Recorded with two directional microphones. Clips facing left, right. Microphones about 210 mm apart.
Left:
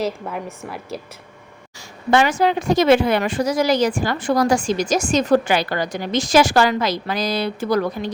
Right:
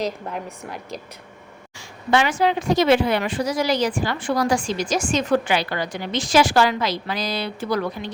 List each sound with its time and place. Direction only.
0.0 s a woman's voice: 5° left (ahead or behind)
2.0 s a woman's voice: 45° left (ahead or behind)